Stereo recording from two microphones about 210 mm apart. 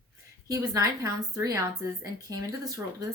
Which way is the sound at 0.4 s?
15° right (ahead or behind).